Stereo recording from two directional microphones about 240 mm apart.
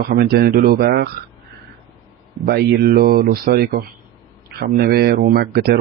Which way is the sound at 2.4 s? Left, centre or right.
Right.